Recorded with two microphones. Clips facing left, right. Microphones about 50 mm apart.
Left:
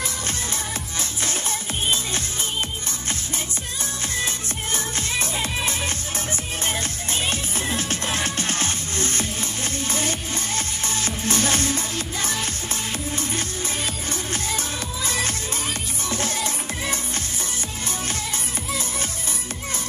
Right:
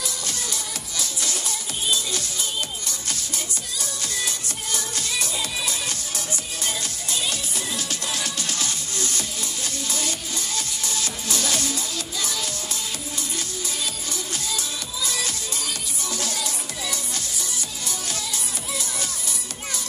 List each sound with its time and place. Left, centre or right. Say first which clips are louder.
0.9 s music: even; left
4.7 s music: left 2 dB; left
14.3 s music: left 2 dB; left